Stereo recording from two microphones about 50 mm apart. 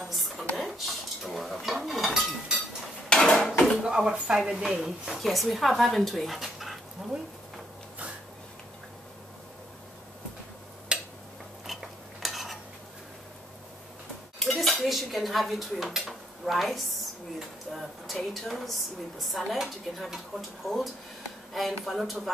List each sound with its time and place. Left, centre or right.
0.1 s a sound: centre
0.6 s dishes: centre
3.1 s dishes: centre
3.3 s dishes: centre
3.8 s speech: centre
5.1 s speech: centre
10.9 s a sound: right
11.6 s stir: centre
14.4 s dishes: centre
17.4 s a woman's voice: centre